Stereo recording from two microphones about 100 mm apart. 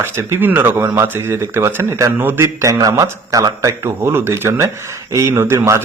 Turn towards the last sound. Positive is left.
turn(degrees=-25)  # may be behind; listen again after turning